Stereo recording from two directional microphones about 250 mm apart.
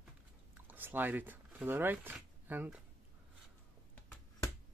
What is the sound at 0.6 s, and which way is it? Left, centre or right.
Speech, centre.